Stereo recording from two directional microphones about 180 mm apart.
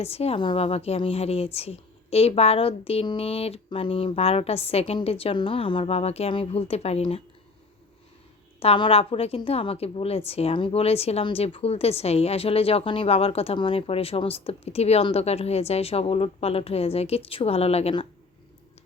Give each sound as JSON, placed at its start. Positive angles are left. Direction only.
{"t": 0.0, "sound": "a woman's voice", "side_deg": 35}
{"t": 8.5, "sound": "a woman's voice", "side_deg": 30}